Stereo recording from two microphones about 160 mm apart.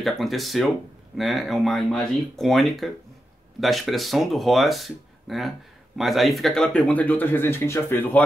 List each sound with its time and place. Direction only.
0.0 s speech: centre (ahead or behind)